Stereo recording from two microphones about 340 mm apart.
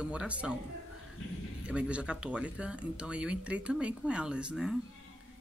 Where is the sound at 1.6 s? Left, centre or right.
Centre.